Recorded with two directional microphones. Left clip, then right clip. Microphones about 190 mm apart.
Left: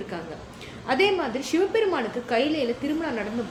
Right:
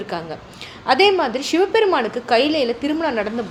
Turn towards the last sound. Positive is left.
turn(degrees=-40)  # may be behind; listen again after turning